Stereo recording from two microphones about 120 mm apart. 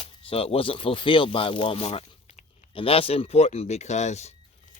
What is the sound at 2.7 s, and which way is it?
Speech, 50° left (ahead or behind).